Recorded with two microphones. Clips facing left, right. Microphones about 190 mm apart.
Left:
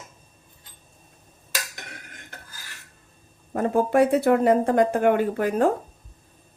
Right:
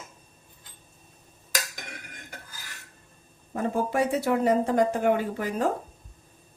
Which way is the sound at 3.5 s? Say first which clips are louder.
Left 6 dB; 55° left (ahead or behind).